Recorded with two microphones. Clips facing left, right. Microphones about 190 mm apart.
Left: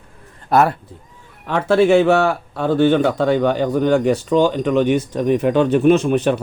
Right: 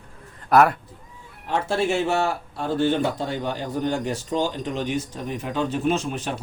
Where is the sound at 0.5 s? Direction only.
30° left (ahead or behind).